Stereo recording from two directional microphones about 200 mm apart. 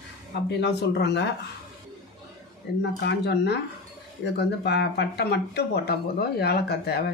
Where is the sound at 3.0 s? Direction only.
55° left (ahead or behind).